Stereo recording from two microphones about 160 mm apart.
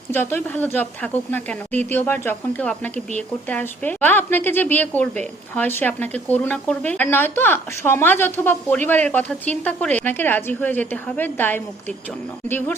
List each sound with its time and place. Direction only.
0.1 s a woman's voice: 15° left (ahead or behind)